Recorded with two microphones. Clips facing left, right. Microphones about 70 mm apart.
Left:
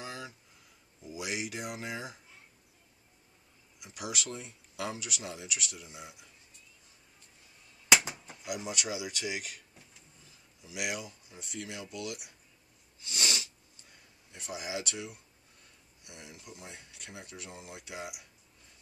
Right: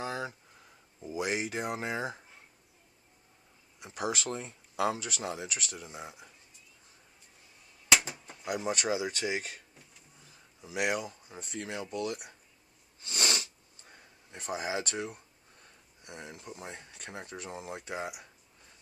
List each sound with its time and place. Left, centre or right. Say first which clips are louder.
0.0 s a sound: right 7 dB; right
1.0 s speech: right 5 dB; right
3.8 s speech: right 5 dB; right
8.5 s speech: right 5 dB; right
10.6 s speech: right 6 dB; right
13.0 s sniff: right 2 dB; right
16.0 s speech: right 5 dB; right